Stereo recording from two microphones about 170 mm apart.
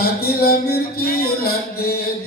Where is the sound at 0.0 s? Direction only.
65° left (ahead or behind).